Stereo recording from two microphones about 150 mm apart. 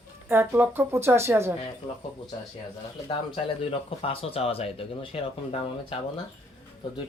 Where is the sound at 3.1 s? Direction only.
35° left (ahead or behind).